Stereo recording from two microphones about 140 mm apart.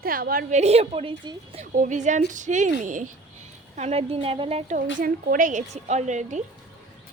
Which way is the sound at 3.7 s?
50° right (ahead or behind).